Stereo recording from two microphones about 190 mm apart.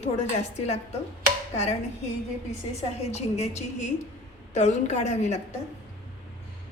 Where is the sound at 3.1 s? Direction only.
35° left (ahead or behind).